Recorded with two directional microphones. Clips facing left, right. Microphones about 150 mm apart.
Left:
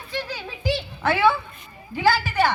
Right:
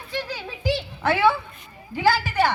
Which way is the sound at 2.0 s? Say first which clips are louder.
Even; 15° right (ahead or behind).